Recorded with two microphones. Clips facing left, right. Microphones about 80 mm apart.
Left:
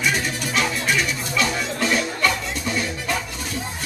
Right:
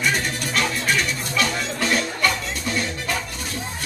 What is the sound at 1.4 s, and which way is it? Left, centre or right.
Music, centre.